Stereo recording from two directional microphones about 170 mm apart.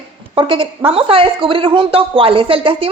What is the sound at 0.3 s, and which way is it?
A woman's voice, 30° right (ahead or behind).